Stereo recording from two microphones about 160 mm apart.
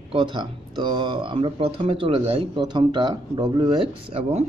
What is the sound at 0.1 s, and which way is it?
Speech, 30° right (ahead or behind).